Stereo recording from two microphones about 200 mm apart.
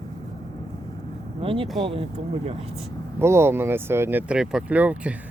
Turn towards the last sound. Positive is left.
turn(degrees=-5)  # may be behind; listen again after turning